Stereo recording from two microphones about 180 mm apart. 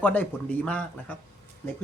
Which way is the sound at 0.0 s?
10° left (ahead or behind).